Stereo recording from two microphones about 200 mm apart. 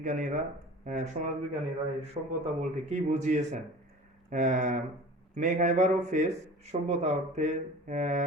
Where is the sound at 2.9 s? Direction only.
35° right (ahead or behind).